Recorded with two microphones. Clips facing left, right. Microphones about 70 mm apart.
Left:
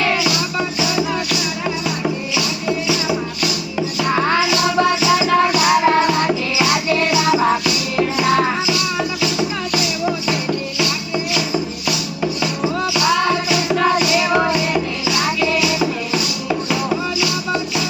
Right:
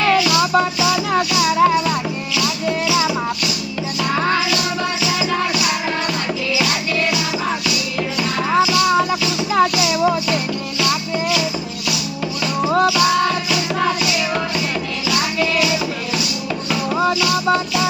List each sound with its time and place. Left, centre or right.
1.1 s music: right
2.3 s music: left
4.1 s music: left
5.5 s music: left
8.7 s music: right
9.7 s music: centre
12.2 s music: centre
16.1 s music: centre